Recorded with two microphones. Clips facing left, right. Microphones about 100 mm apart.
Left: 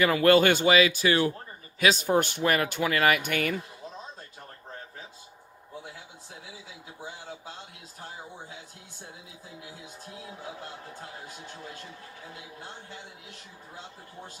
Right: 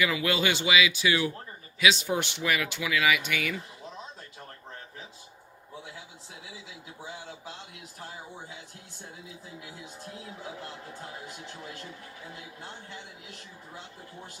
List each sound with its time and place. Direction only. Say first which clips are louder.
0.0 s speech: left 7 dB; 50° left (ahead or behind)